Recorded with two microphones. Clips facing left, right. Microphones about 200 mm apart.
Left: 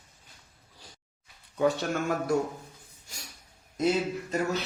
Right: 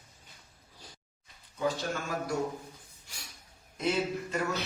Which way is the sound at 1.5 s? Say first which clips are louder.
Left 6 dB; 65° left (ahead or behind).